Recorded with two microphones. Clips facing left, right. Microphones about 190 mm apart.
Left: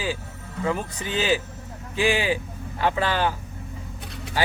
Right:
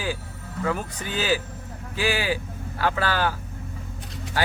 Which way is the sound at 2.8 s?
20° left (ahead or behind).